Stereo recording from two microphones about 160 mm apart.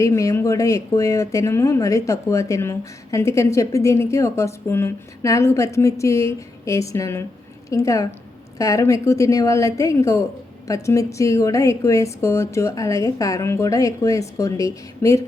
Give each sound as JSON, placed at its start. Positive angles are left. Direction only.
{"t": 0.0, "sound": "speech", "side_deg": 20}